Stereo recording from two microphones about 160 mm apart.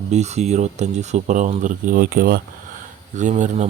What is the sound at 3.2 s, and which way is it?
Speech, 50° right (ahead or behind).